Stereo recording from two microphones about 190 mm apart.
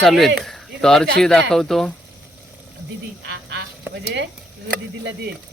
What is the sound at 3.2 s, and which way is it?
Honk, 65° right (ahead or behind).